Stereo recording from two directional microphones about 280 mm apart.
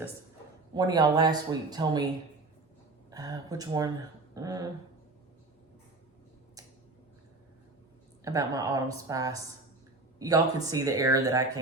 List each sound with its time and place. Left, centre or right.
0.7 s speech: centre
3.1 s speech: centre
8.2 s speech: centre